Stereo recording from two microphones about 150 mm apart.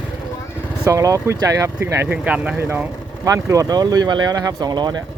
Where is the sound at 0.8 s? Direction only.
20° right (ahead or behind).